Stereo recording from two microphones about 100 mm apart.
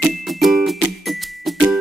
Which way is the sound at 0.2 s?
Centre (ahead or behind).